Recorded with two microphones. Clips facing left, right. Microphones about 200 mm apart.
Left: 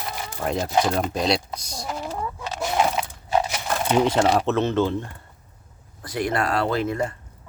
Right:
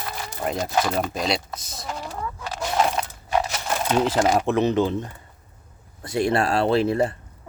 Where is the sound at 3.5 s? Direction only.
10° left (ahead or behind).